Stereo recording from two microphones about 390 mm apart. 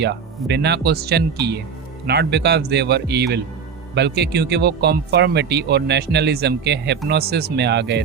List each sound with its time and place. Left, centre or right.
0.0 s speech: right